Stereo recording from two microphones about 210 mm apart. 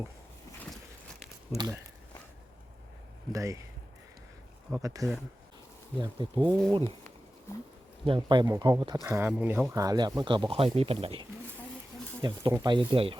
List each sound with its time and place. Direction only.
1.5 s speech: 20° right (ahead or behind)
3.3 s speech: 15° right (ahead or behind)
4.7 s speech: 15° right (ahead or behind)
6.5 s speech: 5° left (ahead or behind)
8.0 s speech: 25° right (ahead or behind)